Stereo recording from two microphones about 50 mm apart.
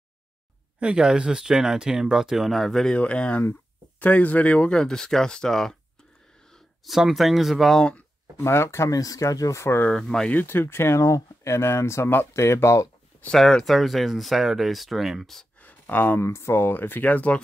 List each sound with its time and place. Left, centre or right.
0.7 s speech: centre
3.0 s speech: left
4.7 s speech: centre
6.5 s a sound: centre
7.0 s speech: centre
8.4 s speech: left
9.9 s speech: centre
10.3 s speech: left
11.0 s speech: left
11.6 s speech: left
13.3 s speech: centre
13.7 s speech: centre
15.6 s a sound: left
16.2 s speech: left